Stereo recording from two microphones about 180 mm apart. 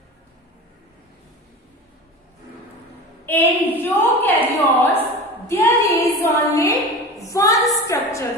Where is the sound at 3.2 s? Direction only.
10° left (ahead or behind).